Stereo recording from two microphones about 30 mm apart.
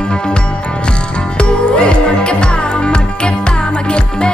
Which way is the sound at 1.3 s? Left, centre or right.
Left.